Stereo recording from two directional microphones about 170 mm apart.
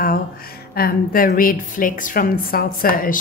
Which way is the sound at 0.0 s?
60° left (ahead or behind).